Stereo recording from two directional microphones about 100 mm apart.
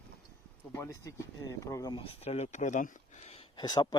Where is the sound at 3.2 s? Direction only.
90° left.